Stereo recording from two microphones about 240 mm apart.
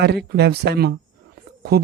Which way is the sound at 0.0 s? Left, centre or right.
Right.